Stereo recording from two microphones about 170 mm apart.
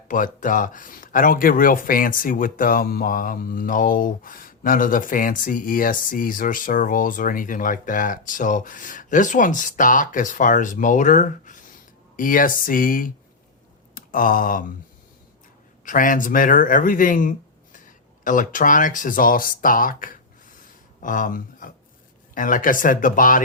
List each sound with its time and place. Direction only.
0.1 s speech: 50° left (ahead or behind)
13.9 s a sound: 55° left (ahead or behind)
15.8 s speech: 50° left (ahead or behind)